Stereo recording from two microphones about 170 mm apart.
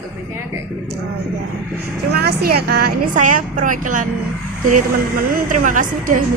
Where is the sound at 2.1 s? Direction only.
70° right (ahead or behind); by 4.0 s 50° right (ahead or behind).